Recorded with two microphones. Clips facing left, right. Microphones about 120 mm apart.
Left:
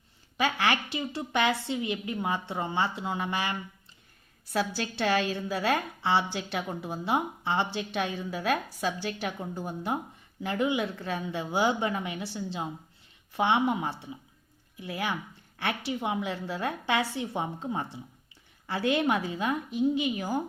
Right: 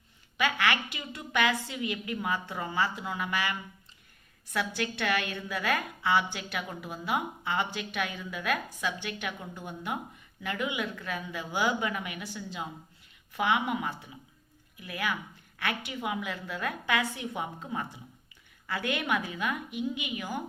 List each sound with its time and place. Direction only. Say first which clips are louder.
0.3 s a woman's voice: left 1 dB; 30° left (ahead or behind)